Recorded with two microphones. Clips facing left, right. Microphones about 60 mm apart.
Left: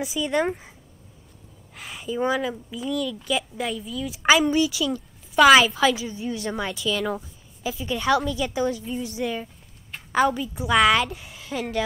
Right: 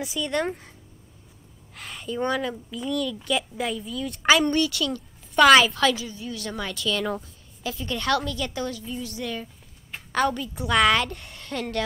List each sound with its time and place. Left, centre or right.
0.0 s a woman's voice: centre
1.8 s a woman's voice: centre
6.1 s a woman's voice: left
6.5 s a woman's voice: centre